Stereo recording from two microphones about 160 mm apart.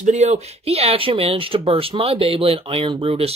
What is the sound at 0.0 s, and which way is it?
Speech, 50° right (ahead or behind).